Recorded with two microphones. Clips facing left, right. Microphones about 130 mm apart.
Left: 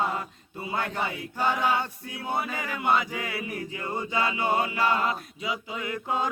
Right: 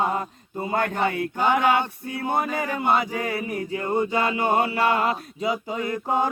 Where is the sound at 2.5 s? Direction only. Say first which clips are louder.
Right 4 dB; 40° right (ahead or behind).